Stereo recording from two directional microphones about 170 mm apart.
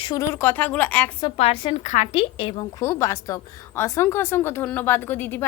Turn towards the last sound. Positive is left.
turn(degrees=10)  # may be behind; listen again after turning